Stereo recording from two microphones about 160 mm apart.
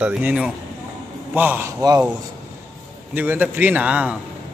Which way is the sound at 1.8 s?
25° right (ahead or behind).